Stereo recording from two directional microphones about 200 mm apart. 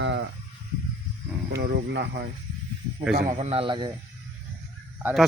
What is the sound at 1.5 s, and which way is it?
Speech, 50° right (ahead or behind).